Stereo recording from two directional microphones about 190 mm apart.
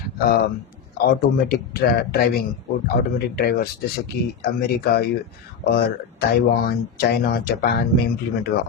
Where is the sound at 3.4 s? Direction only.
55° left (ahead or behind).